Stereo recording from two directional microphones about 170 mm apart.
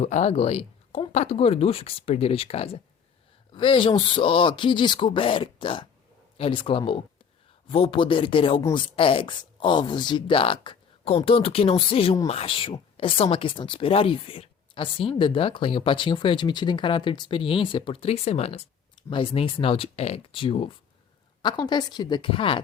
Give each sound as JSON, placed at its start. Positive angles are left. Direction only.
{"t": 0.0, "sound": "speech", "side_deg": 40}